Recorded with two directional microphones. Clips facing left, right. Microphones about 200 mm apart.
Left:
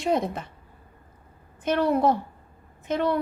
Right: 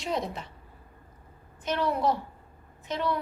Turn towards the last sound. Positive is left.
turn(degrees=50)  # may be behind; listen again after turning